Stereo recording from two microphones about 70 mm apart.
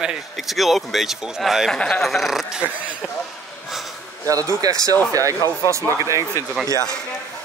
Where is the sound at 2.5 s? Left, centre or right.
Centre.